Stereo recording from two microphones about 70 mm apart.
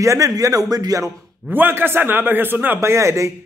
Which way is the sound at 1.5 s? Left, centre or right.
Right.